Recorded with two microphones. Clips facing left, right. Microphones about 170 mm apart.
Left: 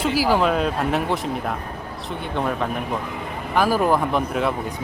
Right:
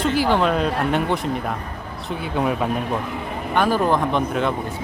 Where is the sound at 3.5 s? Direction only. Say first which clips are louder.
Even; 5° left (ahead or behind).